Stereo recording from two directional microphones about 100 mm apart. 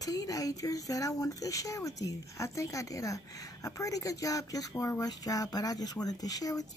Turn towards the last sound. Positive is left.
turn(degrees=40)  # may be behind; listen again after turning